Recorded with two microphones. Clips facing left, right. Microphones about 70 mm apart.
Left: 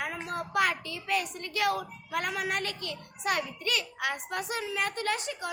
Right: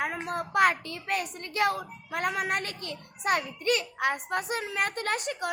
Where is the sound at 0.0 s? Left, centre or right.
Right.